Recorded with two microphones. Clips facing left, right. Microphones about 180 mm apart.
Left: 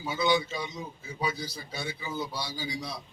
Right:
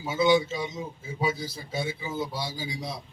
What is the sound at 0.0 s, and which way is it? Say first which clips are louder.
A man's voice: right 5 dB; 25° right (ahead or behind).